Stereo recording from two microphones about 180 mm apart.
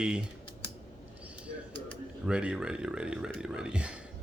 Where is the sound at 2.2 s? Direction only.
5° right (ahead or behind).